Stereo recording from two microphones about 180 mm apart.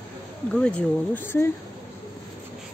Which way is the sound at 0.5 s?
5° left (ahead or behind).